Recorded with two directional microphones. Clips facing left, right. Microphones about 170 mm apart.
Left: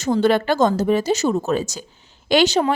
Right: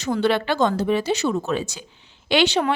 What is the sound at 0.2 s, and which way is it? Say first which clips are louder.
Speech: left 3 dB; 45° left (ahead or behind).